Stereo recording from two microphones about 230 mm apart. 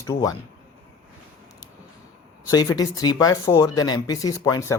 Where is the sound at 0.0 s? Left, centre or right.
Centre.